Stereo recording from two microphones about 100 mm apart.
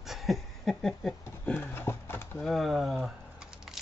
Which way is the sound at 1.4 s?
20° left (ahead or behind).